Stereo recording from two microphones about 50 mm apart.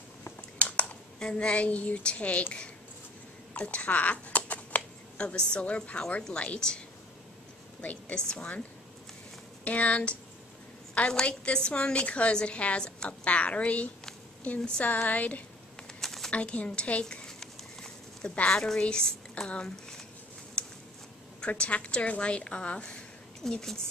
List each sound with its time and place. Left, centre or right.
0.6 s a sound: left
1.2 s a woman's voice: left
3.5 s speech: left
7.8 s a woman's voice: left
8.2 s a woman's voice: centre
9.7 s a woman's voice: left
14.9 s speech: left
16.0 s a sound: centre
16.3 s a woman's voice: left
17.0 s a sound: centre
18.3 s a woman's voice: left
20.6 s a sound: left
21.4 s a woman's voice: left
23.5 s a woman's voice: centre